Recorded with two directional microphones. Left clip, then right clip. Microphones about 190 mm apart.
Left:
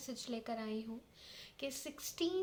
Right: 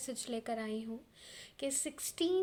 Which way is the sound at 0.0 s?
35° right (ahead or behind).